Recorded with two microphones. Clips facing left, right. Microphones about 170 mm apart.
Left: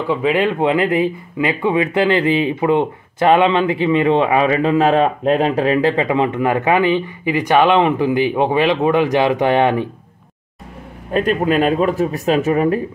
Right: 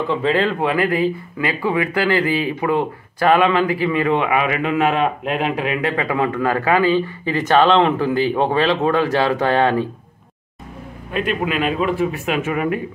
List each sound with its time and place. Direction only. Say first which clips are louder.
0.1 s speech: left 3 dB; 15° left (ahead or behind)
11.1 s speech: left 5 dB; 40° left (ahead or behind)